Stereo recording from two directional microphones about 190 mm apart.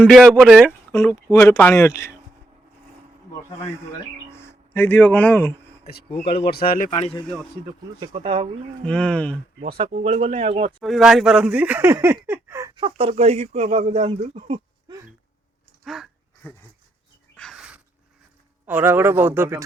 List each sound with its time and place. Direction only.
0.0 s speech: centre (ahead or behind)
0.9 s speech: 15° left (ahead or behind)
4.3 s speech: 15° left (ahead or behind)
5.8 s speech: 55° left (ahead or behind)
7.0 s a man's voice: 25° left (ahead or behind)
7.9 s speech: 30° right (ahead or behind)
8.8 s speech: 5° left (ahead or behind)
9.6 s speech: 30° right (ahead or behind)
10.7 s speech: centre (ahead or behind); by 14.9 s 30° right (ahead or behind)
15.8 s a sound: centre (ahead or behind)
18.6 s speech: 10° right (ahead or behind)